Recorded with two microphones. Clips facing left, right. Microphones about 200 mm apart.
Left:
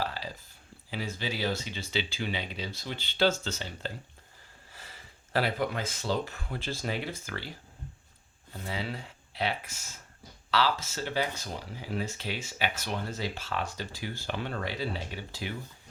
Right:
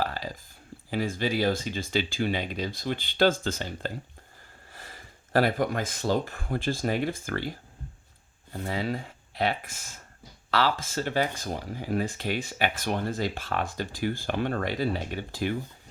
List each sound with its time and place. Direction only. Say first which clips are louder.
0.0 s a sound: right 4 dB; 45° right (ahead or behind)
0.9 s speech: right 7 dB; 50° right (ahead or behind)
4.7 s gasp: right 4 dB; 50° right (ahead or behind)
5.9 s speech: right 4 dB; 50° right (ahead or behind)
8.5 s speech: right 6 dB; 50° right (ahead or behind)